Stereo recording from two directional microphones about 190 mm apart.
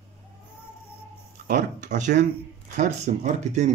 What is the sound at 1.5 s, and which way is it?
Speech, 40° right (ahead or behind).